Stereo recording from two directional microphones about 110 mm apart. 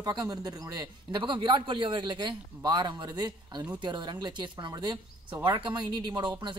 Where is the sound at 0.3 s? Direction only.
35° right (ahead or behind).